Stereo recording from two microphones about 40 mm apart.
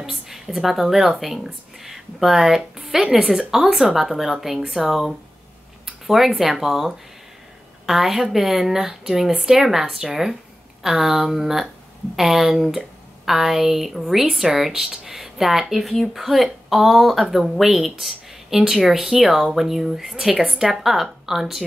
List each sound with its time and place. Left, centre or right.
0.1 s speech: centre
5.9 s a sound: centre
6.5 s speech: centre